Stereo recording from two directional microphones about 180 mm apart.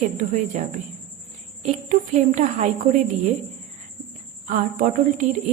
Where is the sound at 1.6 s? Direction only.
40° right (ahead or behind).